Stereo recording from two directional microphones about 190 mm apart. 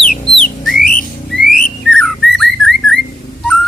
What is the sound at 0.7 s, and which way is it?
Whistling, 45° left (ahead or behind).